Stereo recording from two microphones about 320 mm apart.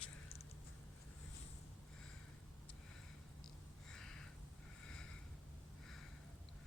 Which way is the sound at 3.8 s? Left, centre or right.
Centre.